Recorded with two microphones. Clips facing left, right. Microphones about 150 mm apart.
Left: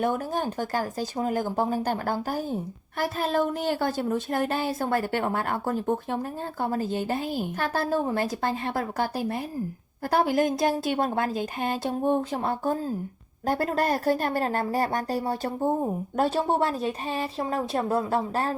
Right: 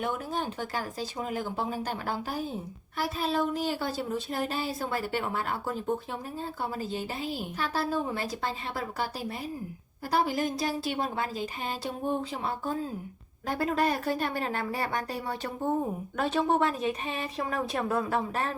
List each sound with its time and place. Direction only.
0.0 s a woman's voice: 45° left (ahead or behind)